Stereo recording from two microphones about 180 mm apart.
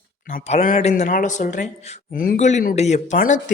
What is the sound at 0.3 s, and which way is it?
Speech, 45° left (ahead or behind).